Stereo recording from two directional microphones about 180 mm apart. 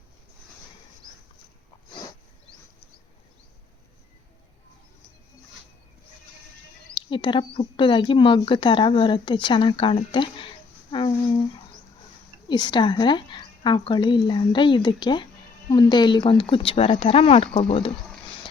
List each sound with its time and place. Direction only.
6.9 s speech: 25° left (ahead or behind)
12.5 s speech: 25° left (ahead or behind)